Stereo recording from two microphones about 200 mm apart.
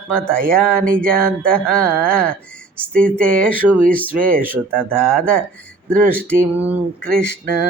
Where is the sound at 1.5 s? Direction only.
5° left (ahead or behind).